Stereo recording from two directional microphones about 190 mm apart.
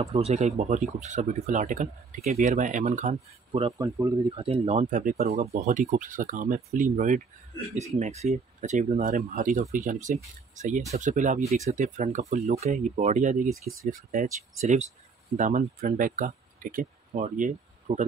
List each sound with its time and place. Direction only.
0.0 s speech: 35° right (ahead or behind)
3.7 s speech: 20° right (ahead or behind)
4.5 s speech: 35° right (ahead or behind)